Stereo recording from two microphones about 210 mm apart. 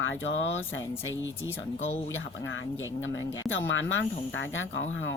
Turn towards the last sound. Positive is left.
turn(degrees=60)  # may be behind; listen again after turning